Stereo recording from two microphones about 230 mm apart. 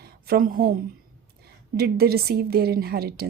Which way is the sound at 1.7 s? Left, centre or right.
Right.